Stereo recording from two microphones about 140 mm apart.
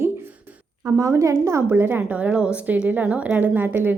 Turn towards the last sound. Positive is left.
turn(degrees=-15)  # may be behind; listen again after turning